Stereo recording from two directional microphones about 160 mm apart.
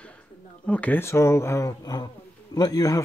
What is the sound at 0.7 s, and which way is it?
Speech, 10° left (ahead or behind).